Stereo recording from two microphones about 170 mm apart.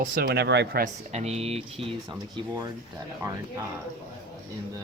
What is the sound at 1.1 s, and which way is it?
Speech, 40° right (ahead or behind).